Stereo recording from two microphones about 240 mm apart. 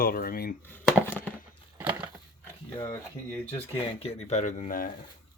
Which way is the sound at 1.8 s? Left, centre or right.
Centre.